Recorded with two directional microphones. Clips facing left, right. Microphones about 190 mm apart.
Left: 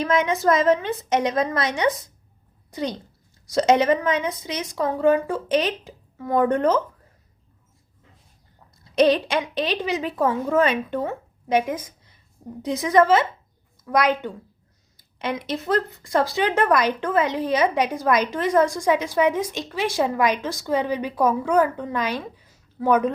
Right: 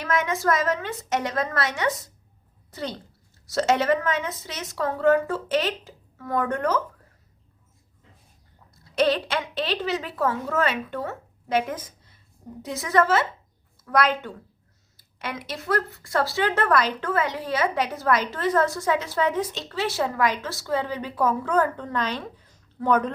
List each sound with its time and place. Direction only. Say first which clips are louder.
0.0 s a woman's voice: left 4 dB; 20° left (ahead or behind)
8.8 s speech: left 4 dB; 15° left (ahead or behind)